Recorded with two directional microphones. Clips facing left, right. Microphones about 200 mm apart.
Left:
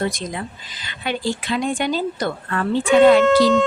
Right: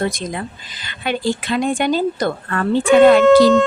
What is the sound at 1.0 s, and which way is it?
Speech, 55° right (ahead or behind).